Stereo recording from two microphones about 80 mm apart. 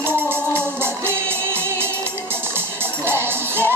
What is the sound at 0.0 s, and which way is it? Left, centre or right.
Music, right.